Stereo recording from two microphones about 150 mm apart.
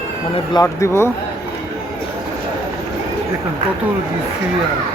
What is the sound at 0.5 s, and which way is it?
Speech, 20° left (ahead or behind).